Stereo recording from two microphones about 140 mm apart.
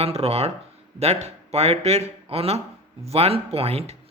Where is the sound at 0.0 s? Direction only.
45° right (ahead or behind).